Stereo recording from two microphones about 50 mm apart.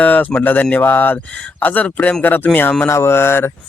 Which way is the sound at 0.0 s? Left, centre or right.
Left.